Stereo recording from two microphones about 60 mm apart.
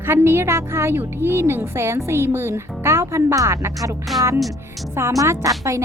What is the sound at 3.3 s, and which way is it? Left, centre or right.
Speech, right.